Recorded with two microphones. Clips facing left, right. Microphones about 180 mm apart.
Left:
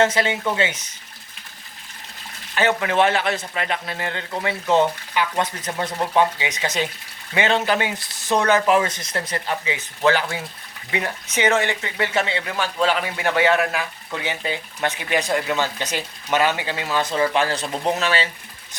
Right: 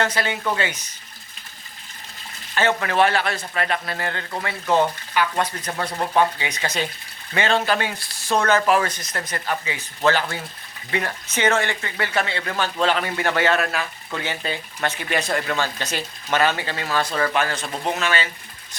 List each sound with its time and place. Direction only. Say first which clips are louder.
0.0 s speech: left 4 dB; 20° left (ahead or behind)
2.6 s speech: left 1 dB; 15° left (ahead or behind)
12.5 s speech: even; 10° left (ahead or behind); by 18.3 s 35° left (ahead or behind)